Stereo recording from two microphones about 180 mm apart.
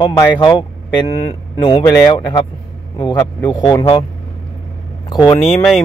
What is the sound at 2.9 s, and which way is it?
A man's voice, 25° left (ahead or behind).